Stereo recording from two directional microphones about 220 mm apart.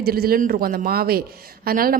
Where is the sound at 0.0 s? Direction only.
45° right (ahead or behind).